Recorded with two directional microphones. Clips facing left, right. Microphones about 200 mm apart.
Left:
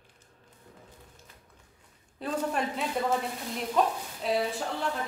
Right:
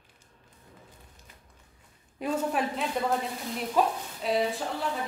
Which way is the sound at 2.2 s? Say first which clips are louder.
Right 3 dB; 15° right (ahead or behind).